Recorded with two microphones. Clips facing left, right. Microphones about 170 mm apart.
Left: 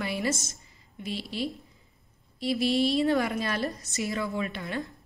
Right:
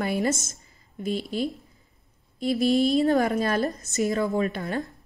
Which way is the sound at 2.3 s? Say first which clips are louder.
Right 4 dB; 45° right (ahead or behind).